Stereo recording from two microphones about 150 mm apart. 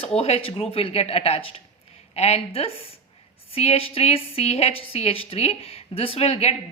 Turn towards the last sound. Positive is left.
turn(degrees=45)  # may be behind; listen again after turning